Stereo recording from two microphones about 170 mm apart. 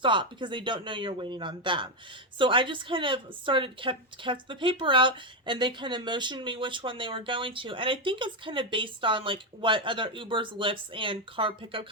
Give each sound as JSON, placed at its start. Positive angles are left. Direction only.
{"t": 0.0, "sound": "speech", "side_deg": -30}